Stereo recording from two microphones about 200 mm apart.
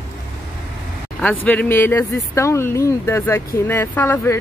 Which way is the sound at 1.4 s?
10° left (ahead or behind).